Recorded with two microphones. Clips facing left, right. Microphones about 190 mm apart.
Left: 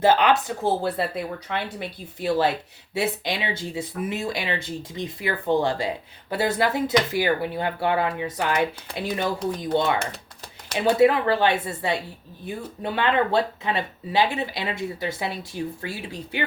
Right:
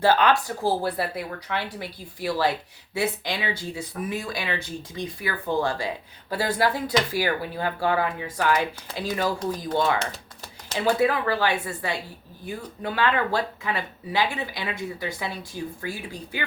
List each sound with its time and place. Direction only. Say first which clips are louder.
0.0 s speech: left 1 dB; 20° left (ahead or behind)